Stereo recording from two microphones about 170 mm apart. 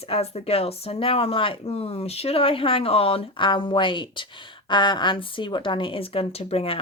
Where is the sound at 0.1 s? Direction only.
35° left (ahead or behind).